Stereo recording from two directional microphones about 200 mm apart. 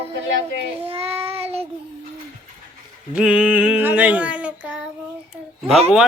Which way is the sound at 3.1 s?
5° right (ahead or behind).